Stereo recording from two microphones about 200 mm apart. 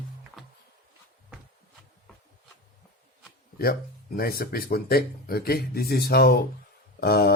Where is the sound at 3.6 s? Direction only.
50° left (ahead or behind).